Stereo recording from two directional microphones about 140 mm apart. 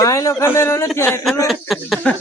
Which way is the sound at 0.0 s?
25° left (ahead or behind).